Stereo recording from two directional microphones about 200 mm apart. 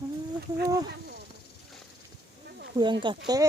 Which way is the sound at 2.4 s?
55° right (ahead or behind).